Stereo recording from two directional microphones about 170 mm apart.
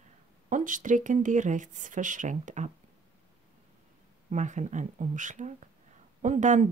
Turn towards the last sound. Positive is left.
turn(degrees=-45)  # may be behind; listen again after turning